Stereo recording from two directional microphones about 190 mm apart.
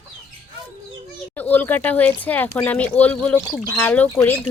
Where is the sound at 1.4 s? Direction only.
10° left (ahead or behind).